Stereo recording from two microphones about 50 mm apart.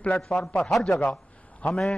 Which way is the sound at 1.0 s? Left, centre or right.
Left.